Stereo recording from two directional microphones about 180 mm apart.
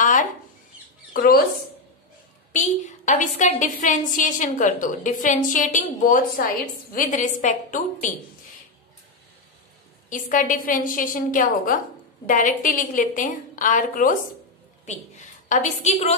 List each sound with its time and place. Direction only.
0.0 s a sound: 45° left (ahead or behind)
1.1 s speech: 55° left (ahead or behind)
3.1 s a woman's voice: 45° left (ahead or behind)
10.0 s a woman's voice: 45° left (ahead or behind)